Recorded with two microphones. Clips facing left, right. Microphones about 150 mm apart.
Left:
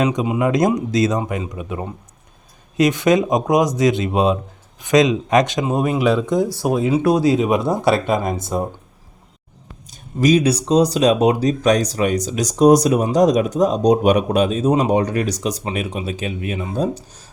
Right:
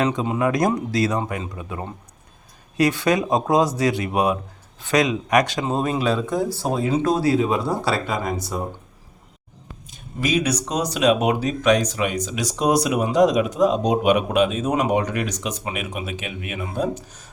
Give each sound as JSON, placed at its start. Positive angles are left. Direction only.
{"t": 0.0, "sound": "speech", "side_deg": 15}
{"t": 9.8, "sound": "speech", "side_deg": 40}